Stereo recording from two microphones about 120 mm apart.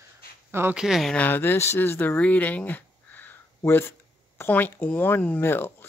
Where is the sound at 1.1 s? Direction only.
15° left (ahead or behind).